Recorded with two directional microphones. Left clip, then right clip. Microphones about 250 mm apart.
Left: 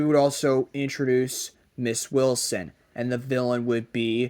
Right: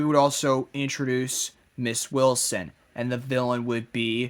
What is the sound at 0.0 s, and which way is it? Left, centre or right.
Speech, centre.